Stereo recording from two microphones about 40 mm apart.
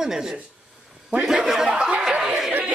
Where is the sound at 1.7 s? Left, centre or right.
Right.